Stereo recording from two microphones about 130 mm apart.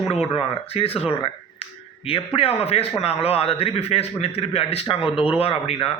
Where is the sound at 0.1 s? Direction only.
50° left (ahead or behind).